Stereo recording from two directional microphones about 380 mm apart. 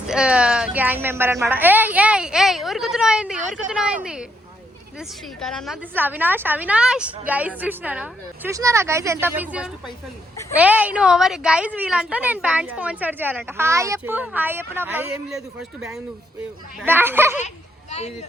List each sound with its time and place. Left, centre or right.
0.1 s a woman's voice: centre
5.4 s speech: centre